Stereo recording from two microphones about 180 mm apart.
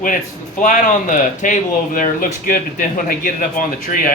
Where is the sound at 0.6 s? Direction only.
45° left (ahead or behind).